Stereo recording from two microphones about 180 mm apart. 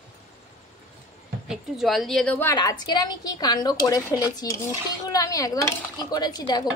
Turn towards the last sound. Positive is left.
turn(degrees=20)  # may be behind; listen again after turning